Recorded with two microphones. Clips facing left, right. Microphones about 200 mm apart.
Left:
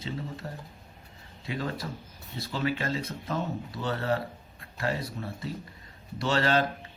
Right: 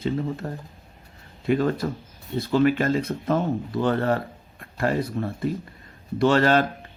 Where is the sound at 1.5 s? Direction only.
55° right (ahead or behind).